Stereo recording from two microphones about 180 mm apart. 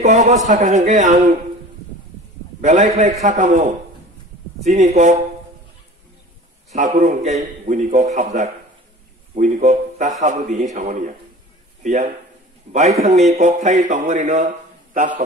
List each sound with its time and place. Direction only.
0.0 s a man's voice: 40° right (ahead or behind)
2.6 s a man's voice: 45° right (ahead or behind)
6.7 s a man's voice: 45° right (ahead or behind)